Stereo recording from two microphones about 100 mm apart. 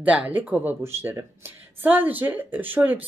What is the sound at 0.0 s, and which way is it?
Speech, 15° right (ahead or behind).